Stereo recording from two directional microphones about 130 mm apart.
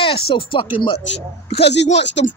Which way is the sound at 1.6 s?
60° left (ahead or behind).